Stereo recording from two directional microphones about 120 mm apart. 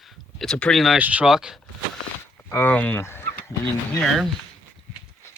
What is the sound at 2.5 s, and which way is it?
Speech, 15° left (ahead or behind).